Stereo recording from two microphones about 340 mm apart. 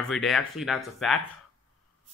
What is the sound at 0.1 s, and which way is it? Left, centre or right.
Speech, centre.